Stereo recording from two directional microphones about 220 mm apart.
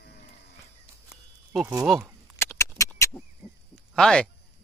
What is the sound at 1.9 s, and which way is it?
Speech, centre (ahead or behind).